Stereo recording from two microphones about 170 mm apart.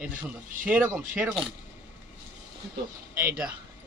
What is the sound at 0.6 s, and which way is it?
Speech, 10° right (ahead or behind).